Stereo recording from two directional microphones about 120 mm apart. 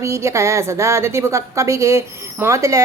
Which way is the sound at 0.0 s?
25° right (ahead or behind).